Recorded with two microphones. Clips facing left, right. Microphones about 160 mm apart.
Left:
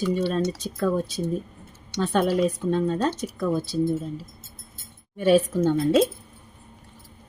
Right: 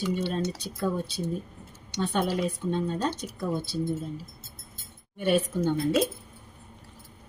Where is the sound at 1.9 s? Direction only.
85° left.